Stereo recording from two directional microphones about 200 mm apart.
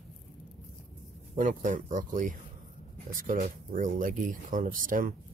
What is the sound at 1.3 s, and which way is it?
Speech, 40° right (ahead or behind).